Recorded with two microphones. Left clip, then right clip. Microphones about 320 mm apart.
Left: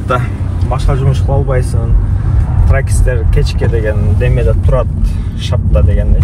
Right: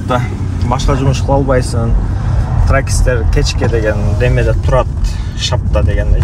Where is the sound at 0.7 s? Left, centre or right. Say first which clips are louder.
Right 2 dB; right.